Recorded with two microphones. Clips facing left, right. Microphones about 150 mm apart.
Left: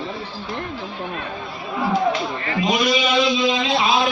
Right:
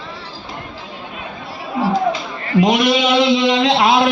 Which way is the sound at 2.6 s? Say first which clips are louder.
Right 6 dB; 70° right (ahead or behind).